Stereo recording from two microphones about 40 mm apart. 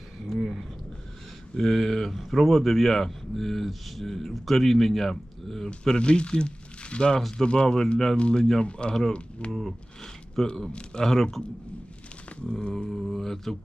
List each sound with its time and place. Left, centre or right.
0.3 s a sound: centre
1.5 s speech: centre; by 7.2 s left
7.2 s speech: centre
7.4 s speech: left
9.5 s a sound: centre
10.7 s speech: left
11.0 s speech: centre
12.5 s speech: centre
13.0 s speech: centre